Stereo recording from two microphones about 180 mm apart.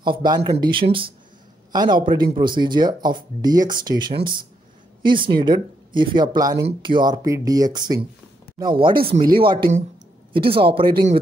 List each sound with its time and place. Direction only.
0.0 s speech: 25° right (ahead or behind)